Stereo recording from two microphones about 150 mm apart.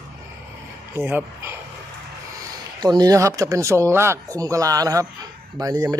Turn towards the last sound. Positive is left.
turn(degrees=-25)  # may be behind; listen again after turning